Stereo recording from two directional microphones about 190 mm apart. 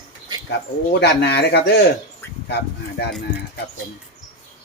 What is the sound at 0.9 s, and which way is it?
Speech, 60° left (ahead or behind).